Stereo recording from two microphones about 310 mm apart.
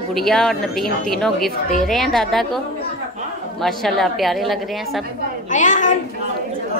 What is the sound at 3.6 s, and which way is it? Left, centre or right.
Speech, centre.